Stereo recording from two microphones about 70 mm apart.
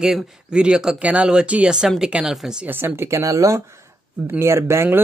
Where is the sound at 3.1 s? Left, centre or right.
Right.